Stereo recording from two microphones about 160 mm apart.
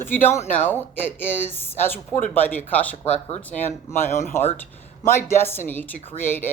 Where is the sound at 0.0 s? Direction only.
10° left (ahead or behind).